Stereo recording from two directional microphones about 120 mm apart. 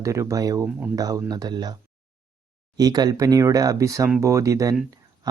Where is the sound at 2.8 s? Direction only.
35° right (ahead or behind).